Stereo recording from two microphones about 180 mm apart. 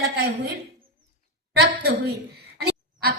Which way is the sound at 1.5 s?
65° right (ahead or behind).